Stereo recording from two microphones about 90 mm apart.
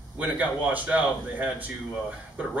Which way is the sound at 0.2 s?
20° right (ahead or behind).